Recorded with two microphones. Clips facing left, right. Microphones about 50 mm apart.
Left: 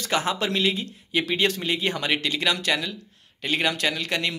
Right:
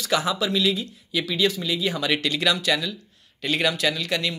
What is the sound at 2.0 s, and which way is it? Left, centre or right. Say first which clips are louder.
Speech: right 3 dB; left.